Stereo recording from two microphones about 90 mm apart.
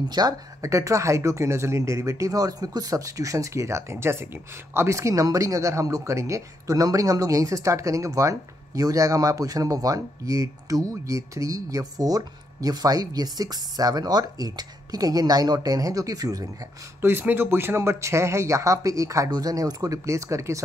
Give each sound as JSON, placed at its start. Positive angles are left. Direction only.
{"t": 0.1, "sound": "speech", "side_deg": -45}
{"t": 17.0, "sound": "speech", "side_deg": -25}